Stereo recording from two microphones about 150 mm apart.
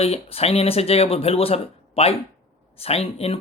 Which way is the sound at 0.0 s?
40° left (ahead or behind).